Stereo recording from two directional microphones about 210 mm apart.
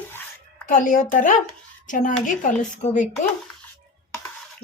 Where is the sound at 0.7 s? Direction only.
35° left (ahead or behind).